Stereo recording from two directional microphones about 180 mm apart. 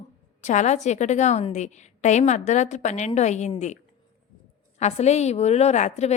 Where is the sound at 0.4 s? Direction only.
40° left (ahead or behind).